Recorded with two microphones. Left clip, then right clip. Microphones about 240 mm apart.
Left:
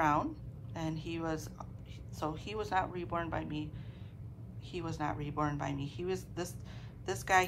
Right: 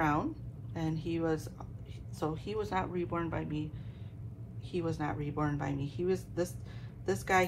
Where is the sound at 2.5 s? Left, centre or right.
Centre.